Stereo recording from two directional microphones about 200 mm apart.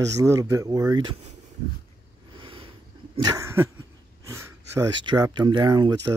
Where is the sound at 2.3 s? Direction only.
25° right (ahead or behind).